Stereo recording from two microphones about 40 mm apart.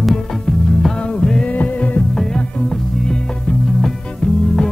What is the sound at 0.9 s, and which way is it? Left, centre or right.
Music, left.